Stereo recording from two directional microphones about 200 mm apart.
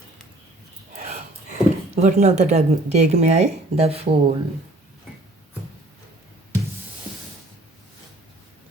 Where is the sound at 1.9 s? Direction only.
35° right (ahead or behind).